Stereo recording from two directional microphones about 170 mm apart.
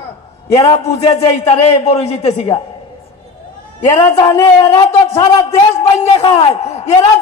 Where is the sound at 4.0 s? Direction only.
25° left (ahead or behind).